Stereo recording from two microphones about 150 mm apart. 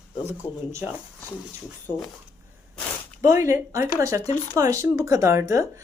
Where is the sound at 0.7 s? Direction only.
20° right (ahead or behind).